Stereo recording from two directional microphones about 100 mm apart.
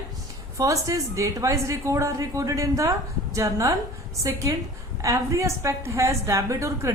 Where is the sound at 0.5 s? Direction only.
35° right (ahead or behind).